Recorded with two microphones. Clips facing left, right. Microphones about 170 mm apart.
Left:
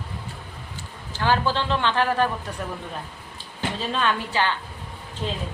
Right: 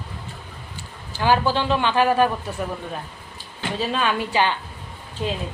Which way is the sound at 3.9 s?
15° right (ahead or behind).